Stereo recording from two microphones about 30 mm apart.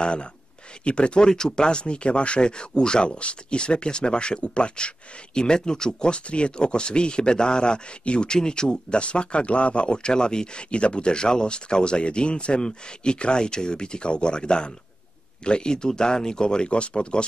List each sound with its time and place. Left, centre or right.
0.0 s speech: left
1.3 s speech: left
1.7 s speech: left
8.3 s speech: left
9.0 s speech: left